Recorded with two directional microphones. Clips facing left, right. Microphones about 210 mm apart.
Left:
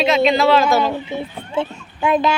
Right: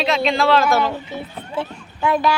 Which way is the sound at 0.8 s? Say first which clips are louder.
Left 3 dB; 25° left (ahead or behind).